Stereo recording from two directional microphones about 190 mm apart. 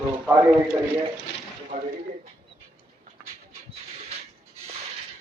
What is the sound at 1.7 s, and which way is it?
Speech, 45° right (ahead or behind).